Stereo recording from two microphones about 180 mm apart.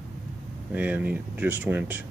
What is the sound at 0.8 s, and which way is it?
Speech, 10° right (ahead or behind).